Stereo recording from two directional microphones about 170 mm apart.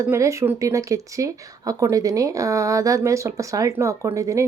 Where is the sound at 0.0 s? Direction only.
15° right (ahead or behind).